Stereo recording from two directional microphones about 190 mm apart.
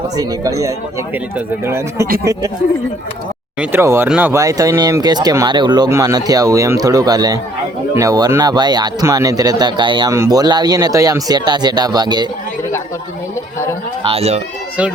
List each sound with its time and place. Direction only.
0.2 s speech: 20° right (ahead or behind)
3.6 s speech: 10° right (ahead or behind)
14.0 s speech: 30° right (ahead or behind)